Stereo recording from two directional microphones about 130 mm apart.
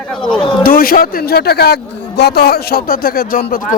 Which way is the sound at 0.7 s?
90° left.